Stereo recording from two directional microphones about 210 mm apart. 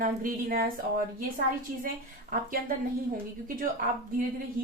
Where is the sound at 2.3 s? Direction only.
40° right (ahead or behind).